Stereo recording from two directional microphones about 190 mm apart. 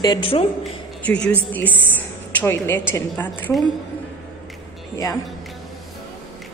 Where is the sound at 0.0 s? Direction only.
25° left (ahead or behind).